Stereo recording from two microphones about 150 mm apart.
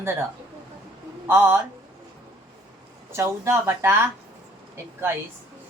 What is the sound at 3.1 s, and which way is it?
Speech, 15° right (ahead or behind).